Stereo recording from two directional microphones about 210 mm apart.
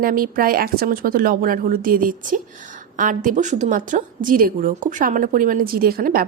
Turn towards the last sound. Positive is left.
turn(degrees=-45)  # may be behind; listen again after turning